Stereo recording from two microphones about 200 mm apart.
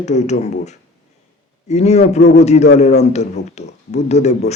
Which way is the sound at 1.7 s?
35° left (ahead or behind).